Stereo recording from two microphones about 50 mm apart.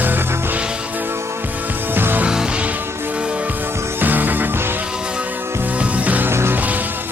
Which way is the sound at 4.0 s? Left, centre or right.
Right.